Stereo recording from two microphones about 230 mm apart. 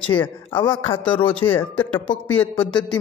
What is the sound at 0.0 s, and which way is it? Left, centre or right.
Speech, left.